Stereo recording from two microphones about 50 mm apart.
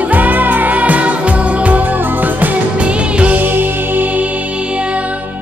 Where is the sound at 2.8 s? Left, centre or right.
Right.